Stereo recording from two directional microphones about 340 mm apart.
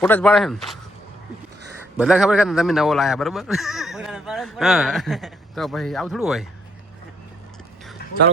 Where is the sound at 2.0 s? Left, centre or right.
Centre.